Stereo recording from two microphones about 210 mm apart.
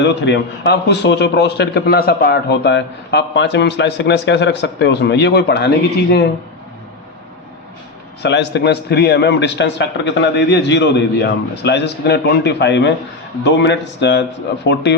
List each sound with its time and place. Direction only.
0.0 s a man's voice: 55° left (ahead or behind)
8.2 s a man's voice: 55° left (ahead or behind)